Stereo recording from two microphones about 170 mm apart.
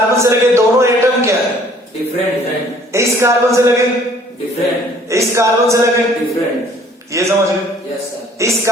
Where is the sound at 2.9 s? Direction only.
15° right (ahead or behind).